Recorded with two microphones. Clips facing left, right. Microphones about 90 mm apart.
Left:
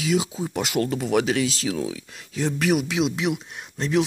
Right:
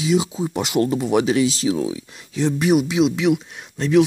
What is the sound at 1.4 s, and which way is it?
Speech, 40° left (ahead or behind).